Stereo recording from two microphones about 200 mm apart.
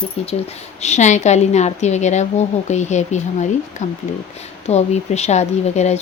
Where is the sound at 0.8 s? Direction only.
35° left (ahead or behind).